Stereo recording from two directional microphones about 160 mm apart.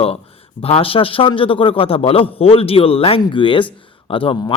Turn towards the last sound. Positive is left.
turn(degrees=35)  # may be behind; listen again after turning